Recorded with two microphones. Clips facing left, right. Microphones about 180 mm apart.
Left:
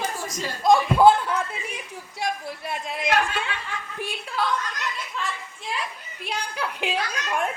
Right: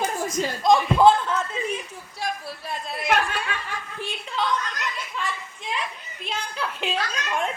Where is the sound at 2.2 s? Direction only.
15° left (ahead or behind).